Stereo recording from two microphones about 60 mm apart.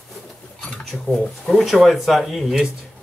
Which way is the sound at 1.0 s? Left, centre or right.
Centre.